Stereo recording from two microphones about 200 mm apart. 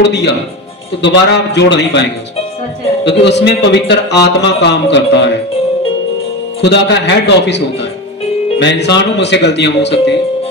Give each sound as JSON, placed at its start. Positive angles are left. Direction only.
{"t": 0.0, "sound": "speech", "side_deg": 60}
{"t": 3.1, "sound": "speech", "side_deg": 60}
{"t": 6.6, "sound": "speech", "side_deg": 60}